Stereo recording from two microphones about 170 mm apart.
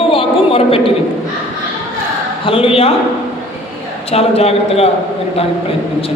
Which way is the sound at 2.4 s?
35° left (ahead or behind).